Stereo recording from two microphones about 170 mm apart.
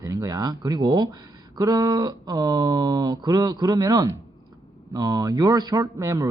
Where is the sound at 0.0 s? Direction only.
20° right (ahead or behind).